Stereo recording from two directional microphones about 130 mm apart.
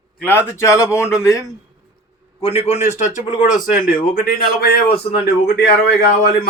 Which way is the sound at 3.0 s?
70° left (ahead or behind).